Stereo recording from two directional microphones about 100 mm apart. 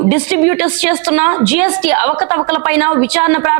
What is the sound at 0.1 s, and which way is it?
A woman's voice, 25° right (ahead or behind).